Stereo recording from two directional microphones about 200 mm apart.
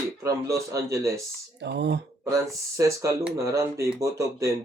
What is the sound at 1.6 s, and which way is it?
Speech, 60° right (ahead or behind).